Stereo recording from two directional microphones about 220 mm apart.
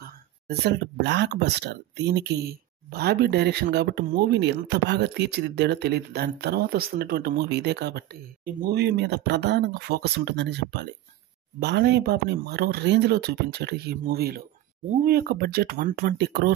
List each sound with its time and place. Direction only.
0.5 s speech: 50° right (ahead or behind)